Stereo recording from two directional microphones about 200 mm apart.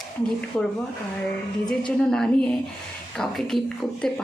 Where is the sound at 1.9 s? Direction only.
5° left (ahead or behind).